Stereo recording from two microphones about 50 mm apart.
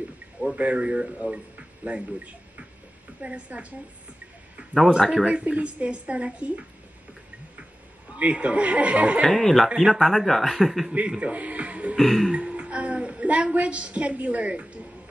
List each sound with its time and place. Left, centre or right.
0.6 s a woman's voice: right
5.2 s a woman's voice: right
8.2 s a woman's voice: right
9.3 s speech: centre
10.9 s a woman's voice: right
12.0 s speech: centre
12.3 s a woman's voice: right